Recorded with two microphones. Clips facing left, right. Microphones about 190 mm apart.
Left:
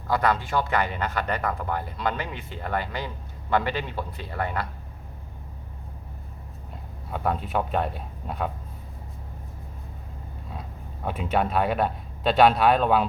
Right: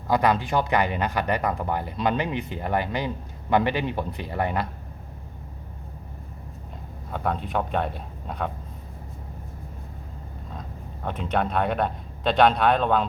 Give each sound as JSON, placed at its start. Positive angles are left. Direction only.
{"t": 0.1, "sound": "speech", "side_deg": -15}
{"t": 7.1, "sound": "speech", "side_deg": 0}
{"t": 11.0, "sound": "speech", "side_deg": 5}